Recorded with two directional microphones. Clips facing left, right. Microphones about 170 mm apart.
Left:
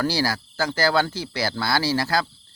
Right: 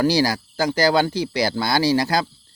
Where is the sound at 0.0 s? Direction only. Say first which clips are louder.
Right 5 dB; 15° right (ahead or behind).